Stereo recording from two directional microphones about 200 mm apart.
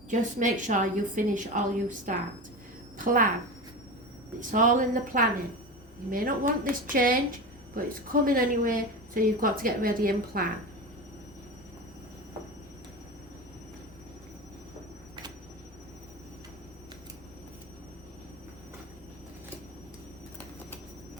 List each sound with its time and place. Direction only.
0.1 s a woman's voice: 40° right (ahead or behind)
4.4 s a woman's voice: 40° right (ahead or behind)